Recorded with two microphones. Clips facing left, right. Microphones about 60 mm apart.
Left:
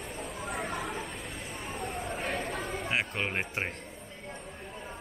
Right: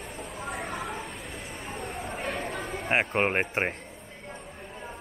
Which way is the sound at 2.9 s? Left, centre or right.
Right.